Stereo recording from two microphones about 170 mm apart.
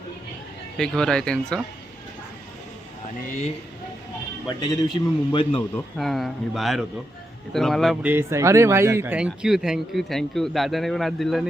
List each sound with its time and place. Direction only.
0.8 s speech: 5° left (ahead or behind)
4.4 s speech: 25° left (ahead or behind)
5.7 s speech: centre (ahead or behind)
8.0 s speech: 15° right (ahead or behind)